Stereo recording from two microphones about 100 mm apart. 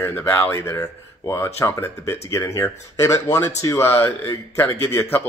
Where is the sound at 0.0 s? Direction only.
25° left (ahead or behind).